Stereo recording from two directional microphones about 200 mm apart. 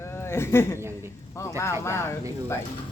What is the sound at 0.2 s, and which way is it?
A man's voice, 10° left (ahead or behind).